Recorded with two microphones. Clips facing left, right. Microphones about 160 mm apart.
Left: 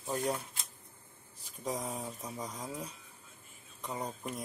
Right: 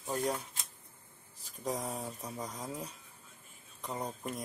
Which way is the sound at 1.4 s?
Centre (ahead or behind).